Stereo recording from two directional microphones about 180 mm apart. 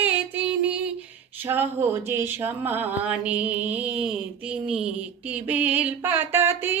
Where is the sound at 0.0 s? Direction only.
10° right (ahead or behind).